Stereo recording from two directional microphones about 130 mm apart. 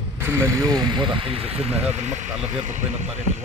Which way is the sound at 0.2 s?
15° right (ahead or behind).